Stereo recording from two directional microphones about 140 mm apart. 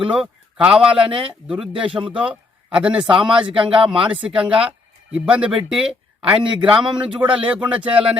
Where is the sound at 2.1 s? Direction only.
10° right (ahead or behind).